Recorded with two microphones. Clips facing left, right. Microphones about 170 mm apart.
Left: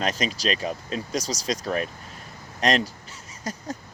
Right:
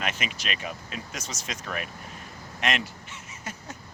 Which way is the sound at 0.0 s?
35° left (ahead or behind).